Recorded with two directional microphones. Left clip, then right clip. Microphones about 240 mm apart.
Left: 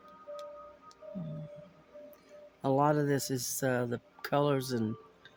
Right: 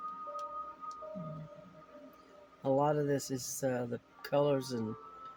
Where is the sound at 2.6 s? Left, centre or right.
Left.